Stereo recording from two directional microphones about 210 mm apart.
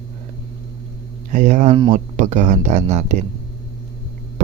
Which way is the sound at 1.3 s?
35° right (ahead or behind).